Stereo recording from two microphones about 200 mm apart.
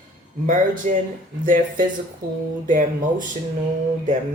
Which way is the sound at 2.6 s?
40° right (ahead or behind).